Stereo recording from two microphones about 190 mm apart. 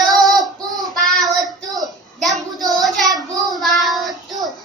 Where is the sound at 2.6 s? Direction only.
20° right (ahead or behind).